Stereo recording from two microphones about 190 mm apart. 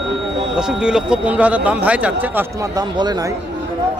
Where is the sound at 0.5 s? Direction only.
5° right (ahead or behind); by 3.3 s 20° right (ahead or behind).